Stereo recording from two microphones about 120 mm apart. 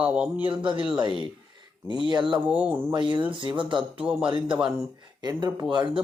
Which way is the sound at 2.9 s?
40° right (ahead or behind).